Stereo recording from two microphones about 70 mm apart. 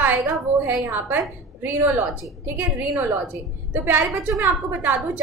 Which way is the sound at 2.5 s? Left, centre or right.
Right.